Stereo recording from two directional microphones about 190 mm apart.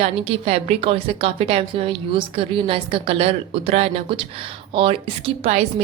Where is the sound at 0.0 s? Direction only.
30° right (ahead or behind).